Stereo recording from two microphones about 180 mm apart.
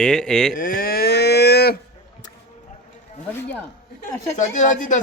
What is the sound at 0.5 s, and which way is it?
Livestock, 50° left (ahead or behind).